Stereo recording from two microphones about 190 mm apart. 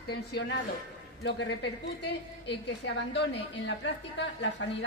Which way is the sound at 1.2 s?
65° left (ahead or behind).